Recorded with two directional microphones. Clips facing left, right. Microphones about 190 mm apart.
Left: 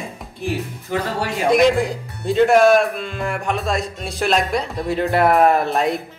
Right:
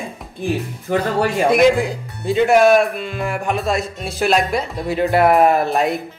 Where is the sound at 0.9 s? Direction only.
55° right (ahead or behind).